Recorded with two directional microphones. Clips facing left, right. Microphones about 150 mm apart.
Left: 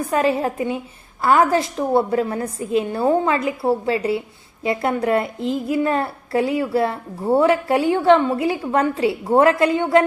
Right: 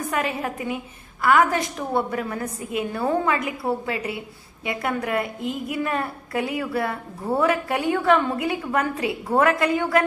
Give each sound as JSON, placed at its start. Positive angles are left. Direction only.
{"t": 0.1, "sound": "a woman's voice", "side_deg": 30}